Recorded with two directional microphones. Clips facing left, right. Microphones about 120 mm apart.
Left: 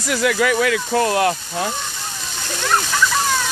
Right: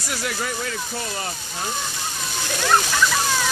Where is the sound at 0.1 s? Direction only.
90° left; by 1.7 s 75° left (ahead or behind).